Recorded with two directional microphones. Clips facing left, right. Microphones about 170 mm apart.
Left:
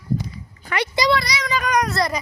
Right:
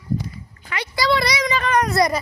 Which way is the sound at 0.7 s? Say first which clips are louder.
Left 5 dB; 45° left (ahead or behind).